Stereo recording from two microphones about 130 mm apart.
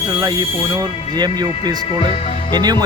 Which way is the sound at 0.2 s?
30° right (ahead or behind).